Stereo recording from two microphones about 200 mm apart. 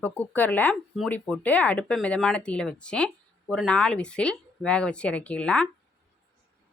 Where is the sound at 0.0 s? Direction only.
10° left (ahead or behind).